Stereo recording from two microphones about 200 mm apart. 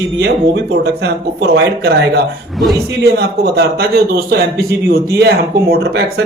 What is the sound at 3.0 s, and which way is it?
Speech, 60° right (ahead or behind).